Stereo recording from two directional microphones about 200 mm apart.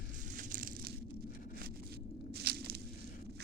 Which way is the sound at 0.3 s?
40° right (ahead or behind).